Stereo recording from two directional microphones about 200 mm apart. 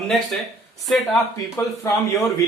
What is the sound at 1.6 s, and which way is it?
Speech, 15° left (ahead or behind).